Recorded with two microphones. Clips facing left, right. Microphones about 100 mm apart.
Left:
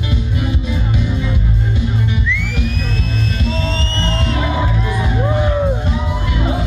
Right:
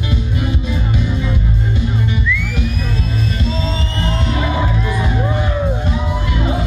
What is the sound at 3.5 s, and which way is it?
Music, 20° right (ahead or behind).